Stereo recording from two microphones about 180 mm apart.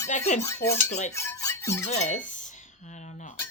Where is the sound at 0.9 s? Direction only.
40° left (ahead or behind).